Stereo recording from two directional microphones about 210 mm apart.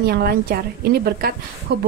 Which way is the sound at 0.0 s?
45° right (ahead or behind).